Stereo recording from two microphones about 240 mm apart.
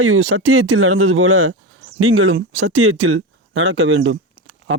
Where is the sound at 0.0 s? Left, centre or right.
Right.